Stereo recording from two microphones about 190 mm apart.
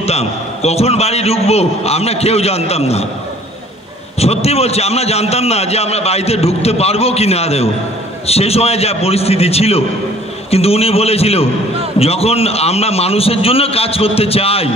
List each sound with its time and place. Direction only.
0.0 s a man's voice: 35° left (ahead or behind)
4.2 s a man's voice: 35° left (ahead or behind)